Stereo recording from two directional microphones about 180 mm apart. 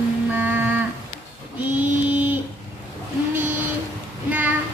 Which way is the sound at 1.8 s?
10° right (ahead or behind).